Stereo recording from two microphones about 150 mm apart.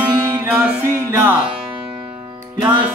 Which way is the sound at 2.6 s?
10° right (ahead or behind).